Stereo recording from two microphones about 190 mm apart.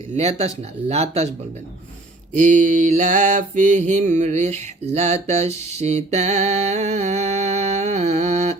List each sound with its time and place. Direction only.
0.2 s speech: 35° right (ahead or behind)
2.4 s mantra: 40° right (ahead or behind)